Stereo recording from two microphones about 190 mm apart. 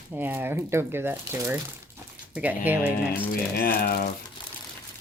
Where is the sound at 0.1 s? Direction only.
10° right (ahead or behind).